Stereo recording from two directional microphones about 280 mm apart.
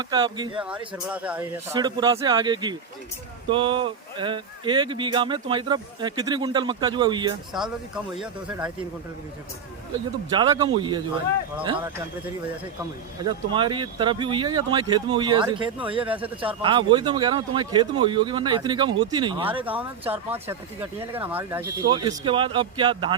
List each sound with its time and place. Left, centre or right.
0.0 s speech: centre
0.6 s speech: centre
7.5 s speech: centre
10.2 s speech: centre
13.2 s speech: centre
16.1 s speech: centre
16.5 s speech: centre
19.6 s speech: centre